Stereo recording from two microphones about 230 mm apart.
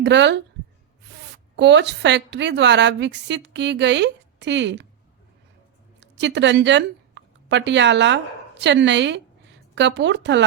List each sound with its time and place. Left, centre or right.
0.0 s a woman's voice: right
1.5 s a woman's voice: right
6.0 s a woman's voice: right